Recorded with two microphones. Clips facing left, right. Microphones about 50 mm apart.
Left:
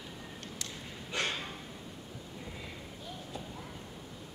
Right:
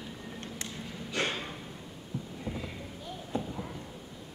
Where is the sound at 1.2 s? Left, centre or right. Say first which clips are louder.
Right 3 dB; centre.